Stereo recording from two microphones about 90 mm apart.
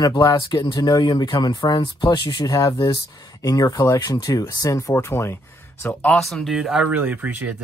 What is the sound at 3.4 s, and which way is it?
Speech, 45° left (ahead or behind).